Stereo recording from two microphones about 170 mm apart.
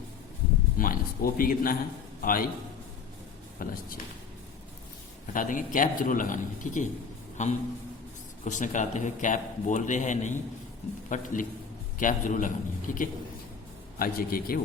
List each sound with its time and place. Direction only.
0.8 s a man's voice: 55° left (ahead or behind)
3.6 s a man's voice: 55° left (ahead or behind)
5.3 s a man's voice: 50° left (ahead or behind)